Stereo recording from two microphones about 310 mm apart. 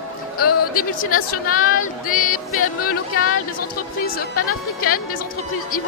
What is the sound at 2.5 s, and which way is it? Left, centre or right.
Speech, left.